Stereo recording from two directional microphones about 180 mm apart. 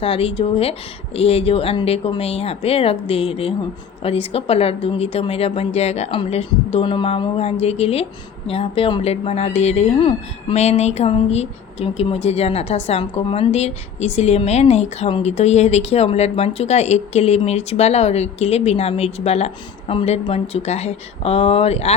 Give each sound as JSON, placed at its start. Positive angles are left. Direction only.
{"t": 0.0, "sound": "speech", "side_deg": 30}